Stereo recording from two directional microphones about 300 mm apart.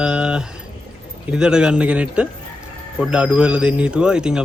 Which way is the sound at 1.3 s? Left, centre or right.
Centre.